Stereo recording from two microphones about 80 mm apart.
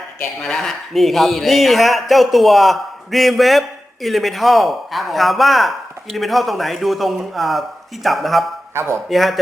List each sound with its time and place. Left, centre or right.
0.4 s a man's voice: centre
8.7 s speech: right
9.0 s a man's voice: centre